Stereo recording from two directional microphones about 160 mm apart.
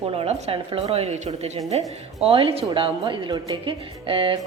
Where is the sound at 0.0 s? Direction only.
40° right (ahead or behind).